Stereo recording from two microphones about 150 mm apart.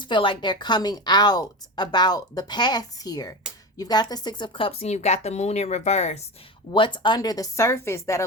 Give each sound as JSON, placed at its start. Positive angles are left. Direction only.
{"t": 0.0, "sound": "speech", "side_deg": 35}
{"t": 6.7, "sound": "speech", "side_deg": 35}